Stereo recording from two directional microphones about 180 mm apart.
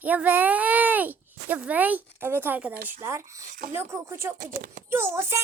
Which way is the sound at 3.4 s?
50° right (ahead or behind).